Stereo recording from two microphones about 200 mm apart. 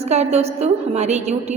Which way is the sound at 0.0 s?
35° right (ahead or behind).